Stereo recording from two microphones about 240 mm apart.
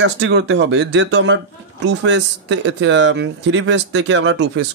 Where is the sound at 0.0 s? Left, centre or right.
Right.